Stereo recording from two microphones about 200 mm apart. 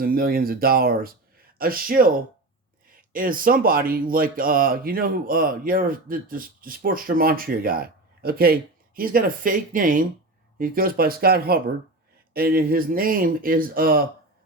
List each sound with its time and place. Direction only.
0.0 s speech: 50° right (ahead or behind)